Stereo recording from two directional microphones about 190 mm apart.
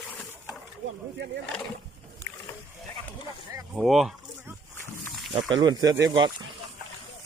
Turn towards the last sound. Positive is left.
turn(degrees=-20)  # may be behind; listen again after turning